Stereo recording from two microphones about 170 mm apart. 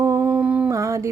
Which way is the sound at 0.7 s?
20° right (ahead or behind).